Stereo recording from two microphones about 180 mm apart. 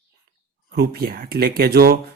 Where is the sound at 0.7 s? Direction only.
60° right (ahead or behind).